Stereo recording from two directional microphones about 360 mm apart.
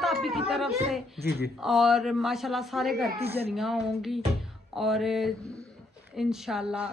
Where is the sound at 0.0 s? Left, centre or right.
Centre.